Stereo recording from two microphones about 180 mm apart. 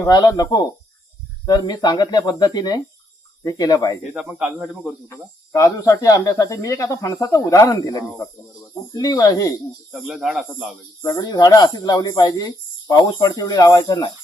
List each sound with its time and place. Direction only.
0.0 s speech: 20° left (ahead or behind)
4.1 s speech: 5° right (ahead or behind)
5.0 s speech: 15° left (ahead or behind)
9.9 s speech: 5° right (ahead or behind)
11.0 s speech: 20° left (ahead or behind)